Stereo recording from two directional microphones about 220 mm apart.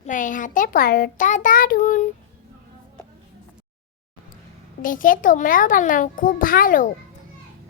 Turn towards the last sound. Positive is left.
turn(degrees=40)  # may be behind; listen again after turning